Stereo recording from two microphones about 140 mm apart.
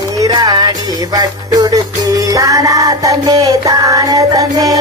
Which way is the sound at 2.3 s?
25° right (ahead or behind).